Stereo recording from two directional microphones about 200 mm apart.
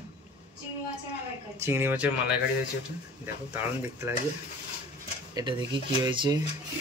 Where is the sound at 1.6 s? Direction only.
10° right (ahead or behind).